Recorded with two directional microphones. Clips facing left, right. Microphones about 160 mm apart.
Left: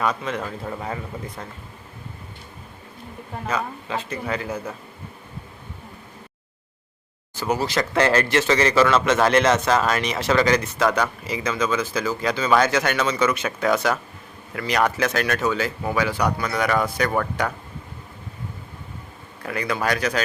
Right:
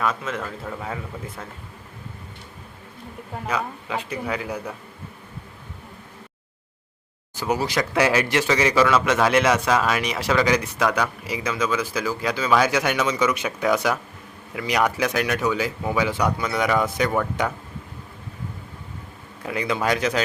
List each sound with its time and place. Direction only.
0.0 s a man's voice: centre (ahead or behind)
0.3 s a man's voice: 10° left (ahead or behind)
3.4 s a man's voice: 10° right (ahead or behind)
7.3 s a man's voice: 15° right (ahead or behind)
19.4 s speech: 20° right (ahead or behind)